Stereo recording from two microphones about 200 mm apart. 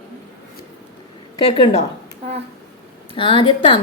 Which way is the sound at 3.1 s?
25° left (ahead or behind).